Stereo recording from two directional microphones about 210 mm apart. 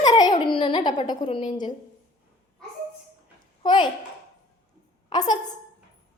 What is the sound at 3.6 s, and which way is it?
Speech, 20° left (ahead or behind).